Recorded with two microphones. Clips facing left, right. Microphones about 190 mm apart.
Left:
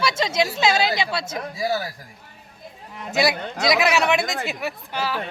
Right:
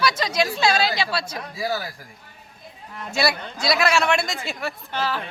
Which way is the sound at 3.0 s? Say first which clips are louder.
Left 2 dB; 15° left (ahead or behind).